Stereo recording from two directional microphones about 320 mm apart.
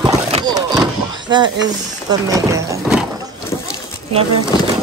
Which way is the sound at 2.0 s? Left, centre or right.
Centre.